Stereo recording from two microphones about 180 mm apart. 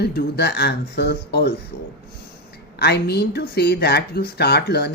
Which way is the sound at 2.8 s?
65° left (ahead or behind).